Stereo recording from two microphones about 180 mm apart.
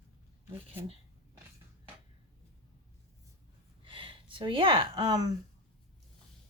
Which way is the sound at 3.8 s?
30° right (ahead or behind).